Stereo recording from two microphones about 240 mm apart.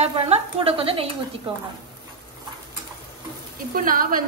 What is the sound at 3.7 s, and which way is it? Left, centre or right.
Speech, right.